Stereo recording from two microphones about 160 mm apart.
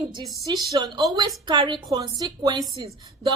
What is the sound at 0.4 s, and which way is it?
Speech, 25° right (ahead or behind).